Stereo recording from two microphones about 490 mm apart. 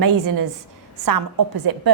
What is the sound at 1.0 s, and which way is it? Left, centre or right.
Speech, right.